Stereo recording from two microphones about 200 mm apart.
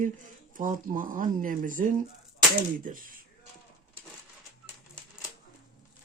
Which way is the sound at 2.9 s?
45° right (ahead or behind).